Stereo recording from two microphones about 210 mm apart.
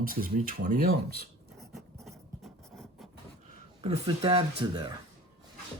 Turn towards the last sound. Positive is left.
turn(degrees=-25)  # may be behind; listen again after turning